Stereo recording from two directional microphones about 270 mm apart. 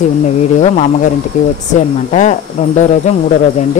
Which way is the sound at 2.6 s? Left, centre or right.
Left.